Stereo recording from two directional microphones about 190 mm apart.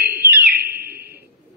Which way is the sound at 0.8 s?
55° right (ahead or behind).